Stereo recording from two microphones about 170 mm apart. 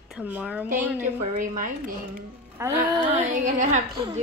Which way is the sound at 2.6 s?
15° right (ahead or behind).